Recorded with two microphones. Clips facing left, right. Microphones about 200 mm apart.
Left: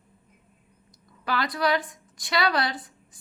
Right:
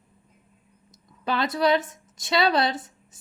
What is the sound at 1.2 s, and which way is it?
A woman's voice, 25° right (ahead or behind).